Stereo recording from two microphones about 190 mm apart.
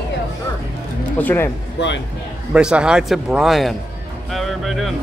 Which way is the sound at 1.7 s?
70° left (ahead or behind).